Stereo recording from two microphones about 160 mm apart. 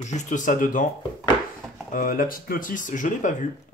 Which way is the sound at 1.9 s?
60° left (ahead or behind).